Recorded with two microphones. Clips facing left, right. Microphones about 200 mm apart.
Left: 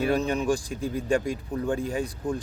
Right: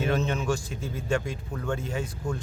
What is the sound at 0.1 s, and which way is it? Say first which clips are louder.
Speech: left 3 dB; 15° left (ahead or behind).